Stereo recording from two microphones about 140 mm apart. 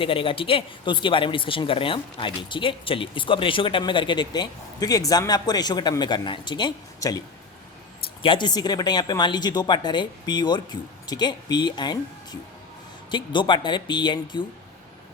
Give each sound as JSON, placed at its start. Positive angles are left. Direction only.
{"t": 0.0, "sound": "speech", "side_deg": 40}
{"t": 8.2, "sound": "speech", "side_deg": 35}